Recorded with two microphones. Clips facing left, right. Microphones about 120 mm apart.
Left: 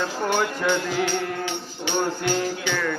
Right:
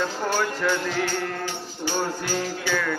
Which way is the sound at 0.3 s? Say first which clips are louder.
Left 1 dB; 20° left (ahead or behind).